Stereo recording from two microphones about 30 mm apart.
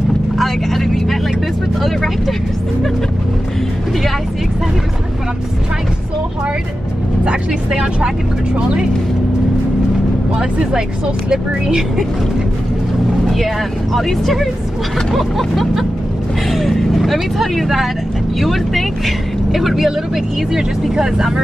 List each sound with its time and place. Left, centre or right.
0.4 s vehicle: centre
1.8 s speech: centre
7.7 s speech: right
8.5 s speech: right
10.3 s speech: right
13.9 s speech: centre
20.9 s speech: centre